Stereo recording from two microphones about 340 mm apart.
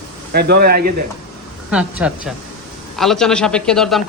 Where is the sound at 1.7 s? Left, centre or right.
Centre.